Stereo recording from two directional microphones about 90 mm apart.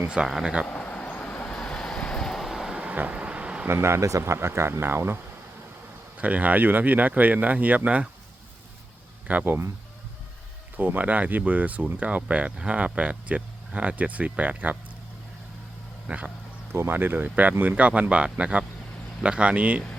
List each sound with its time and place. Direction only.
0.1 s speech: 5° right (ahead or behind)
0.7 s vehicle: 15° left (ahead or behind); by 3.7 s 10° right (ahead or behind)
3.7 s speech: 30° right (ahead or behind)
9.2 s speech: 20° right (ahead or behind)
10.8 s speech: 20° right (ahead or behind)
16.0 s speech: 15° right (ahead or behind)
16.7 s speech: 25° right (ahead or behind)